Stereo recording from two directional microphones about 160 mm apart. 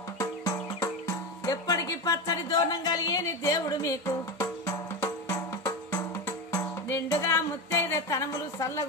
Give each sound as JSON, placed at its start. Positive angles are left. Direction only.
{"t": 0.2, "sound": "music", "side_deg": 20}